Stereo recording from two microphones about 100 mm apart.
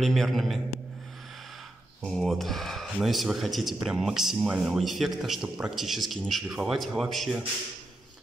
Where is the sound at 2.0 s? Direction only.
Centre (ahead or behind).